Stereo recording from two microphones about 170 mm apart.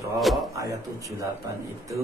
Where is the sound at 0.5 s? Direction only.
20° right (ahead or behind).